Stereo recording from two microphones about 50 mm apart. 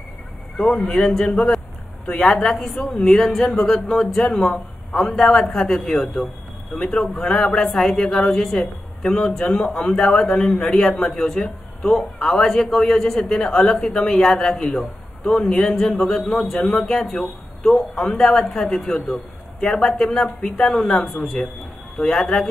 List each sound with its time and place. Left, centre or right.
0.6 s speech: centre
2.4 s speech: centre